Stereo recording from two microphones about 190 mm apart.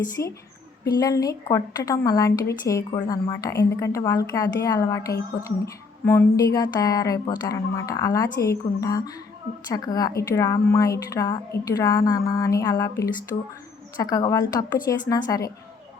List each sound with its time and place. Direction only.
0.2 s a woman's voice: 15° left (ahead or behind)
13.3 s a woman's voice: 30° left (ahead or behind)